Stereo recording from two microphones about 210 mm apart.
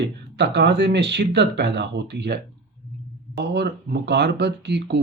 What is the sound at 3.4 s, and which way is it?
Speech, 50° right (ahead or behind).